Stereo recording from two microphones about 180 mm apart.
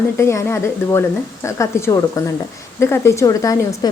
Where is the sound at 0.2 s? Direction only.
15° left (ahead or behind).